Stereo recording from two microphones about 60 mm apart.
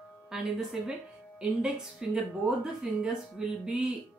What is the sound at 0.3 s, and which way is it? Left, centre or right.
Speech, centre.